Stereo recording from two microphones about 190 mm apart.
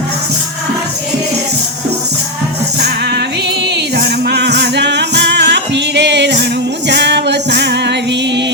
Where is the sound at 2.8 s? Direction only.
60° right (ahead or behind).